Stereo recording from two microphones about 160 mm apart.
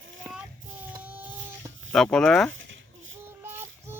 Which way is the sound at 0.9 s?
10° right (ahead or behind).